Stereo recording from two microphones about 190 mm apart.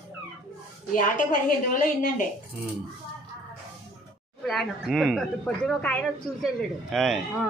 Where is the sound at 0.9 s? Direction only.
45° left (ahead or behind).